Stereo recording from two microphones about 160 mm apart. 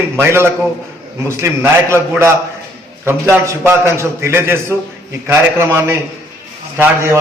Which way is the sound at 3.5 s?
15° right (ahead or behind).